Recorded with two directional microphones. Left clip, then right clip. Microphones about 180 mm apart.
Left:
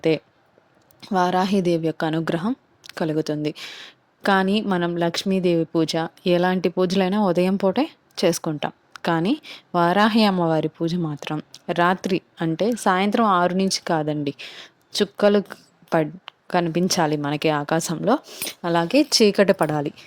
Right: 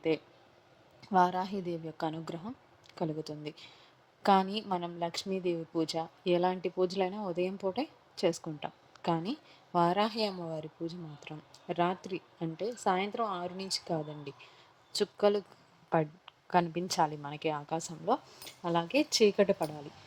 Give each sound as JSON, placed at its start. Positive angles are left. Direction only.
{"t": 1.0, "sound": "a woman's voice", "side_deg": 40}